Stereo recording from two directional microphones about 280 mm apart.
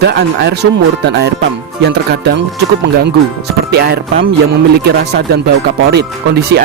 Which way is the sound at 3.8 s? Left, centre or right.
Right.